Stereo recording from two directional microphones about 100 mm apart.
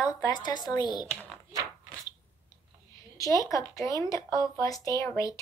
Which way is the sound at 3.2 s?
35° left (ahead or behind).